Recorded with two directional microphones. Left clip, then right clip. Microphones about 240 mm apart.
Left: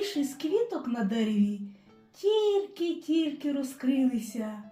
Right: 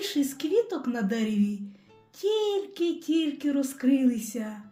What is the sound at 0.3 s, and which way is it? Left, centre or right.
Speech, right.